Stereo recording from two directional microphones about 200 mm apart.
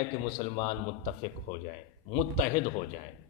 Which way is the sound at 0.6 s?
30° left (ahead or behind).